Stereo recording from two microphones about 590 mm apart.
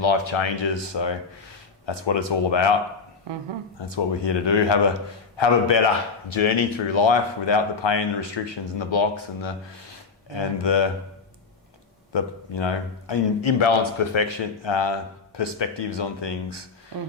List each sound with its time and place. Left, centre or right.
0.0 s a man's voice: left
3.8 s a man's voice: left
12.1 s a man's voice: left